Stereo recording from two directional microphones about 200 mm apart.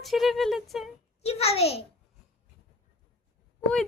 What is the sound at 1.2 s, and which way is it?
Speech, 30° left (ahead or behind).